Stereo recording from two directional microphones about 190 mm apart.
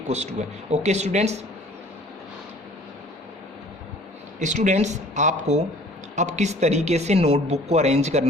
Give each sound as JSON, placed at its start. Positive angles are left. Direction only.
{"t": 0.1, "sound": "speech", "side_deg": -35}
{"t": 4.4, "sound": "speech", "side_deg": -40}